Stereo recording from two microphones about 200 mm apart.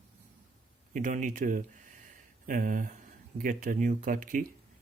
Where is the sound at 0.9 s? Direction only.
40° right (ahead or behind).